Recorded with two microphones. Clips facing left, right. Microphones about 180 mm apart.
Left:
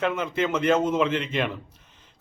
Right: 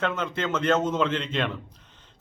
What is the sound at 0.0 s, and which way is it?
Speech, 10° left (ahead or behind).